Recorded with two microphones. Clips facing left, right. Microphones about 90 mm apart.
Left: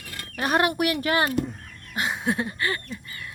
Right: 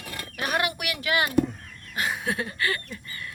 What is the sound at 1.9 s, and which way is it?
Speech, 25° left (ahead or behind).